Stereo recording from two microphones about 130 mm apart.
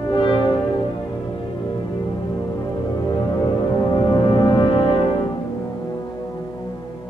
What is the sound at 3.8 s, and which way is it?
Music, 35° left (ahead or behind).